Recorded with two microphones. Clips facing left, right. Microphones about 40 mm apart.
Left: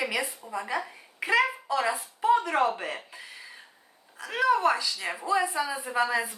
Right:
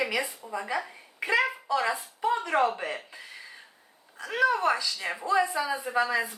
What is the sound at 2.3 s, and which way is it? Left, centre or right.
Speech, centre.